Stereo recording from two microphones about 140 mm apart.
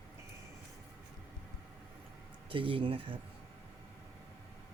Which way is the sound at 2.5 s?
40° right (ahead or behind).